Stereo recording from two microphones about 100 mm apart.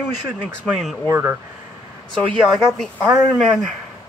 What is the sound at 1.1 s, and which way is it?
Speech, 20° right (ahead or behind).